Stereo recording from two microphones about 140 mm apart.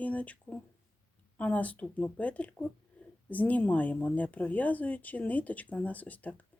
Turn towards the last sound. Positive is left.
turn(degrees=10)  # may be behind; listen again after turning